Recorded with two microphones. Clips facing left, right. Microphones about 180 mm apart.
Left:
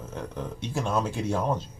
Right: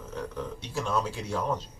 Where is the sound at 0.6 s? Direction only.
50° left (ahead or behind).